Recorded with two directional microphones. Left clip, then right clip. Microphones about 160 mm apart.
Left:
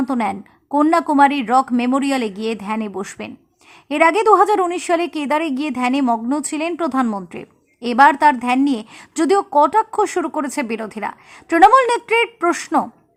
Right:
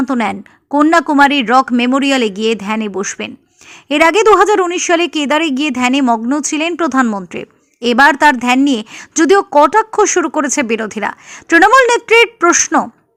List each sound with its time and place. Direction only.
0.0 s a woman's voice: 20° right (ahead or behind)